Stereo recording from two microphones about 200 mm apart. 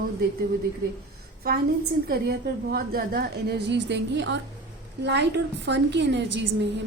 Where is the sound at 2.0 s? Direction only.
50° right (ahead or behind).